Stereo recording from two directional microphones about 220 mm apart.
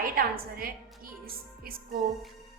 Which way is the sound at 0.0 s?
40° right (ahead or behind).